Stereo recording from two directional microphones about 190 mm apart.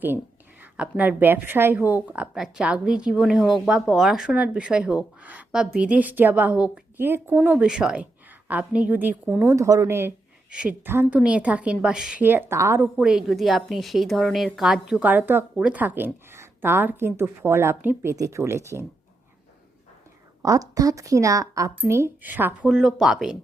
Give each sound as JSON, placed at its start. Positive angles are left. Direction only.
{"t": 0.6, "sound": "a woman's voice", "side_deg": -10}
{"t": 20.4, "sound": "a woman's voice", "side_deg": -20}